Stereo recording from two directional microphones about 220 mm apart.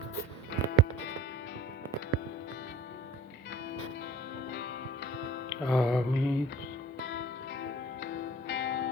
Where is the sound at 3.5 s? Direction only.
50° left (ahead or behind).